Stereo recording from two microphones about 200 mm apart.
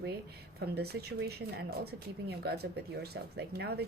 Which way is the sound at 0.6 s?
50° right (ahead or behind).